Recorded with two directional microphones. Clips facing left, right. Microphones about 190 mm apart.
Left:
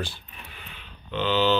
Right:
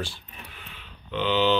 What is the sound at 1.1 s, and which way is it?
Speech, 15° right (ahead or behind).